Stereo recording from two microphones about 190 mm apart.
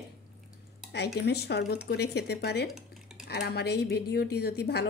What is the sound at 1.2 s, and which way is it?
Speech, 60° left (ahead or behind).